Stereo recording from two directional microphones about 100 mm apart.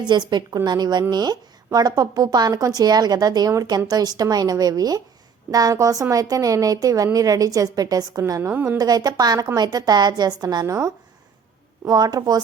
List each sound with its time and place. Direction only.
0.0 s a woman's voice: 45° right (ahead or behind)
8.4 s a woman's voice: 25° right (ahead or behind)
8.8 s a woman's voice: 40° right (ahead or behind)
11.9 s a woman's voice: 40° right (ahead or behind)